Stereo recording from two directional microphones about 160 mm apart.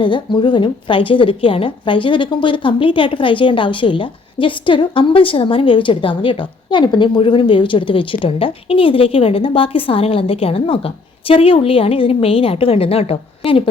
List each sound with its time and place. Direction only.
0.0 s a woman's voice: 30° left (ahead or behind)